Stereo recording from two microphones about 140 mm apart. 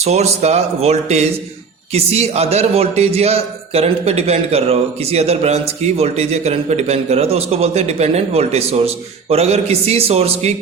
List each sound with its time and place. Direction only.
0.0 s a man's voice: 50° right (ahead or behind)